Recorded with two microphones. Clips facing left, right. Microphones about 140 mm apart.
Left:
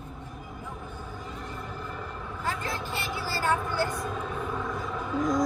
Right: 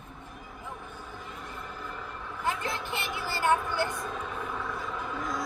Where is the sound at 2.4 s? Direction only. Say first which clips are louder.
Right 1 dB; 20° right (ahead or behind).